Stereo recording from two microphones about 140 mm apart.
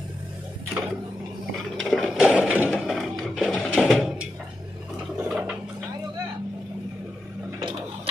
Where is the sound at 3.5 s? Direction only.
5° left (ahead or behind).